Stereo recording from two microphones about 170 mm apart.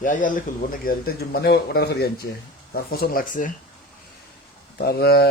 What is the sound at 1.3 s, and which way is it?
Speech, 70° left (ahead or behind).